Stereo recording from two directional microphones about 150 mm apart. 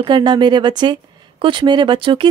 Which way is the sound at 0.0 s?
30° right (ahead or behind).